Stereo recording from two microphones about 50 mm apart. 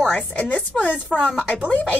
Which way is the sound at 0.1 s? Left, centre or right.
Left.